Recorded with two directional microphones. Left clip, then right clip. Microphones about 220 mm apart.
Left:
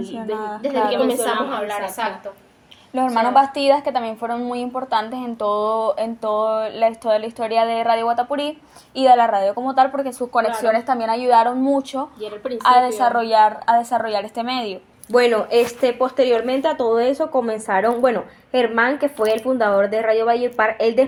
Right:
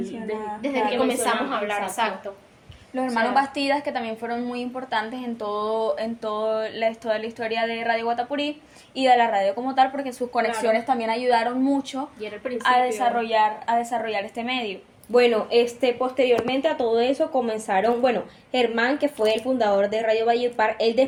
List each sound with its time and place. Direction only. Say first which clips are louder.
0.6 s a woman's voice: left 4 dB; centre (ahead or behind)
2.9 s a woman's voice: left 6 dB; 30° left (ahead or behind)
15.1 s a woman's voice: left 3 dB; 5° left (ahead or behind)
19.8 s speech: left 4 dB; 10° right (ahead or behind)
20.3 s speech: left 3 dB; 10° left (ahead or behind)